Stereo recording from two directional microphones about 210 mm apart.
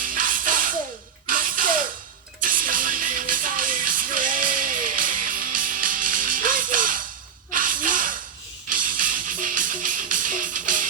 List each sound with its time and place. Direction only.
0.0 s music: 40° right (ahead or behind)
7.5 s gasp: 40° right (ahead or behind)
8.7 s music: 40° right (ahead or behind)